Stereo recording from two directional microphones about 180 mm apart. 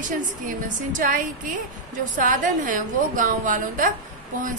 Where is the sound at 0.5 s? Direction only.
50° right (ahead or behind).